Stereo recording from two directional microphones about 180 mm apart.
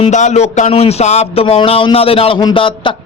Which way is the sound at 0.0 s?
40° left (ahead or behind).